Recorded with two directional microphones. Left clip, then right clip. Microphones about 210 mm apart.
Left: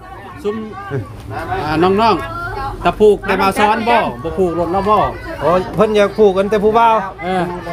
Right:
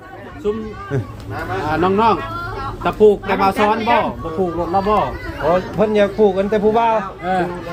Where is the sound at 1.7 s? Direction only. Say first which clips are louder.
Left 2 dB; 55° left (ahead or behind).